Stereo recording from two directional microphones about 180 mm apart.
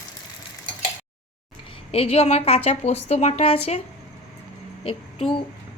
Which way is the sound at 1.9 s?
35° left (ahead or behind).